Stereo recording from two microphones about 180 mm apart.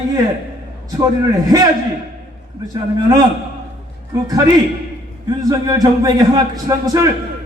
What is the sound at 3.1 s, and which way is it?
Speech, 20° right (ahead or behind).